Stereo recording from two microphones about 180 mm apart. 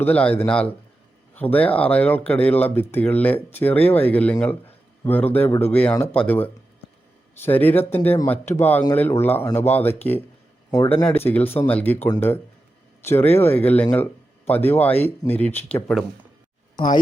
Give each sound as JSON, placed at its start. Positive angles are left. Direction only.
{"t": 0.0, "sound": "speech", "side_deg": 10}